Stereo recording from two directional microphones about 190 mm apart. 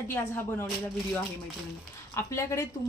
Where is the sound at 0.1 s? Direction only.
10° left (ahead or behind).